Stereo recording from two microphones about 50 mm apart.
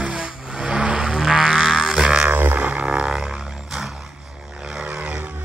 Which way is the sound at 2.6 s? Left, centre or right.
Right.